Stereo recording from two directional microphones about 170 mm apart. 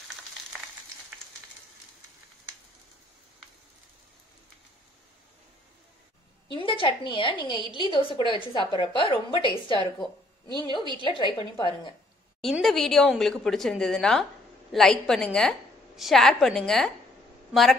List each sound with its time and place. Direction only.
0.5 s frying: 10° right (ahead or behind)
6.5 s a woman's voice: 30° left (ahead or behind)
12.4 s a woman's voice: centre (ahead or behind)